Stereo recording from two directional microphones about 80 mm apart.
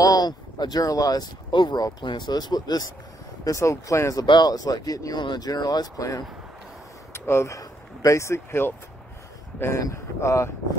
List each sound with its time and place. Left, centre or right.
0.0 s speech: left
1.5 s speech: left
3.4 s speech: left
4.3 s speech: left
7.2 s speech: left
9.8 s speech: left